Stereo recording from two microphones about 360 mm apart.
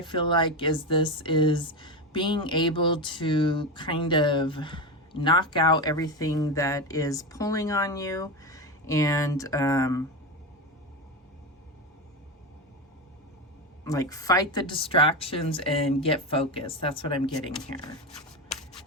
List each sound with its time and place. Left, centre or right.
0.0 s speech: centre
13.8 s speech: centre